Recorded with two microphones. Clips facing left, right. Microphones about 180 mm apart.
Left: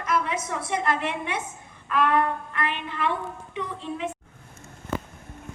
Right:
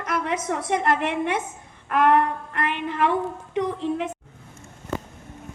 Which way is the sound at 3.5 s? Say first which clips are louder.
Right 9 dB; 75° right (ahead or behind).